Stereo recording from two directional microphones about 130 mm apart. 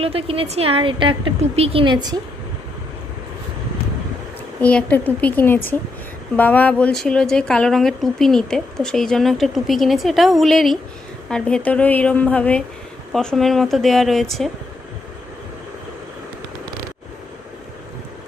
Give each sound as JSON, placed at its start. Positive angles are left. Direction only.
{"t": 0.0, "sound": "a woman's voice", "side_deg": -45}
{"t": 4.6, "sound": "a woman's voice", "side_deg": 10}